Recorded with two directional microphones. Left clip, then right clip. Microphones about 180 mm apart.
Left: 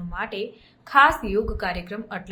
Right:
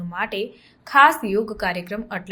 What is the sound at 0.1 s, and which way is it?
A woman's voice, 15° right (ahead or behind).